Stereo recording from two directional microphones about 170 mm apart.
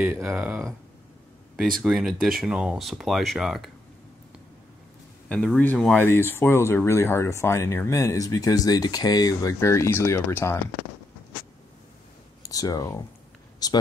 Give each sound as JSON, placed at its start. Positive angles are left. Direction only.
{"t": 0.0, "sound": "speech", "side_deg": -10}
{"t": 1.8, "sound": "speech", "side_deg": 0}
{"t": 5.3, "sound": "speech", "side_deg": 5}
{"t": 12.4, "sound": "speech", "side_deg": 20}